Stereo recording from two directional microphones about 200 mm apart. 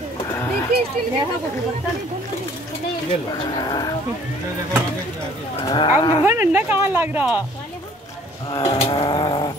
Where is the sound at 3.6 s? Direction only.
20° left (ahead or behind).